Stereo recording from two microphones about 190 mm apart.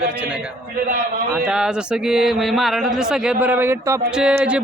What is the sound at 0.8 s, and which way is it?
Speech, 50° right (ahead or behind).